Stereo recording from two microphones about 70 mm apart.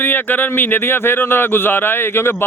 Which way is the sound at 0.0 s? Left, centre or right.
Left.